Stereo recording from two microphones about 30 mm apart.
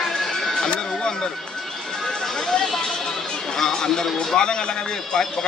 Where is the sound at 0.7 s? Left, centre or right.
Left.